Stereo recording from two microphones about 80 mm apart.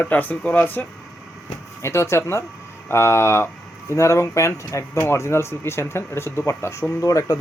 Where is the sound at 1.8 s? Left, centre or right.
Left.